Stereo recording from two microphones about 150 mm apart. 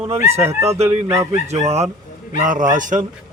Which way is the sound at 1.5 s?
45° right (ahead or behind).